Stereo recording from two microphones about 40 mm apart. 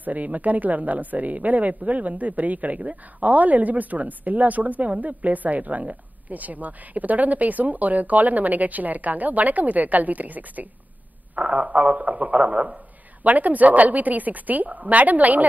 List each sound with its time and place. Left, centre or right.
0.0 s a woman's voice: right
11.3 s a woman's voice: right